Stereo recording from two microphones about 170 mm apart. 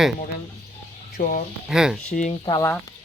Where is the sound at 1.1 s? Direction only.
50° left (ahead or behind).